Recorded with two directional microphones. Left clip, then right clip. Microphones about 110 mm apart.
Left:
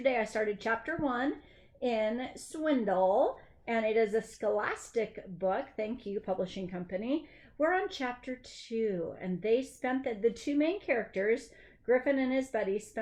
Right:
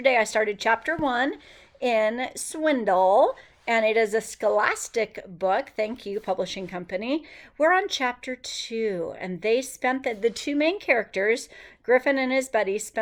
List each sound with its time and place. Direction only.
0.0 s speech: 25° right (ahead or behind)